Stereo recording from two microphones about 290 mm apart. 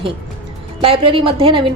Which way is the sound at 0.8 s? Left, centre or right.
Centre.